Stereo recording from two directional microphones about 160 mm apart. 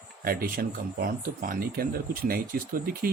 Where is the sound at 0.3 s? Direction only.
65° right (ahead or behind).